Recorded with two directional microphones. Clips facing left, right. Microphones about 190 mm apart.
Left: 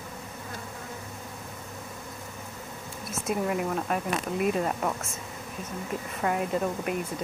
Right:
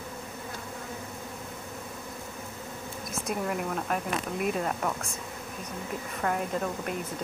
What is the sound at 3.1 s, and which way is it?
Speech, 5° left (ahead or behind).